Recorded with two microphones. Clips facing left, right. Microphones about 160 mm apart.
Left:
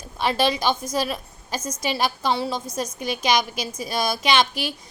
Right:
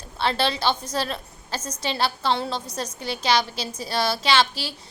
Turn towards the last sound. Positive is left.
turn(degrees=15)  # may be behind; listen again after turning